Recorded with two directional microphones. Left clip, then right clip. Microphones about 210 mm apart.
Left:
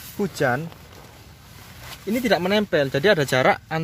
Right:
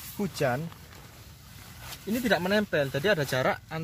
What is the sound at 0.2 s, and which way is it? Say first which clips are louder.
Speech: left 6 dB; 45° left (ahead or behind).